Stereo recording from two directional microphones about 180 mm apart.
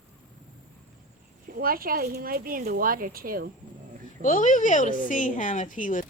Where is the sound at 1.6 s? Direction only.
55° right (ahead or behind).